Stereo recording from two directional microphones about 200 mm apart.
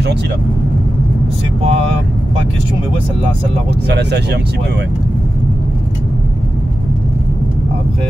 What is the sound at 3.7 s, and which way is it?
Speech, 55° right (ahead or behind).